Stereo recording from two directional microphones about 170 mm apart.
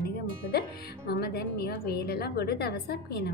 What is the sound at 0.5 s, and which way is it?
Speech, 60° left (ahead or behind).